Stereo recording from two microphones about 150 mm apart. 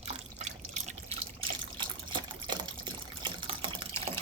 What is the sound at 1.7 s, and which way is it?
Water, 30° right (ahead or behind).